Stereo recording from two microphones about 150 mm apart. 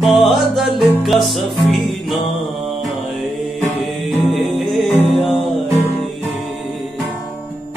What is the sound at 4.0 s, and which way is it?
Music, centre (ahead or behind).